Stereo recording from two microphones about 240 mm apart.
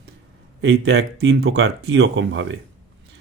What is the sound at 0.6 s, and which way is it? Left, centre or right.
Speech, right.